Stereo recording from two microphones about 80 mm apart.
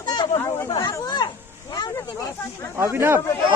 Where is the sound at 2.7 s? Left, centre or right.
Right.